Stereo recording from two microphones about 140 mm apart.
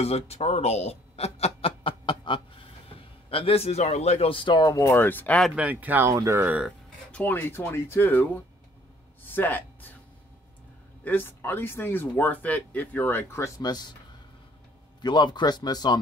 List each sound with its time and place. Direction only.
0.0 s speech: 45° left (ahead or behind); by 5.4 s 15° left (ahead or behind)
5.6 s speech: 10° right (ahead or behind)
7.1 s speech: 10° left (ahead or behind)
9.2 s a sound: 15° left (ahead or behind)
11.1 s speech: 15° left (ahead or behind)
13.6 s speech: 30° left (ahead or behind)
15.0 s speech: 30° left (ahead or behind)